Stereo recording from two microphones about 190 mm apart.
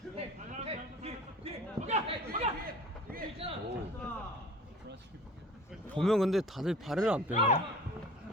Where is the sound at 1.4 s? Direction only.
30° right (ahead or behind).